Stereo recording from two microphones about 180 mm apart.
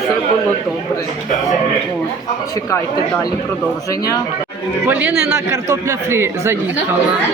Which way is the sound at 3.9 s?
20° left (ahead or behind).